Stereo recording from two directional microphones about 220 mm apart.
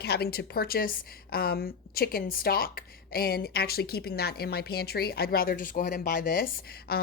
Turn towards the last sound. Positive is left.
turn(degrees=40)  # may be behind; listen again after turning